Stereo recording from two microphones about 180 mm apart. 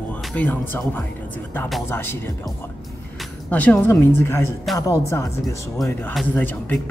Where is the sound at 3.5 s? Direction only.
10° left (ahead or behind).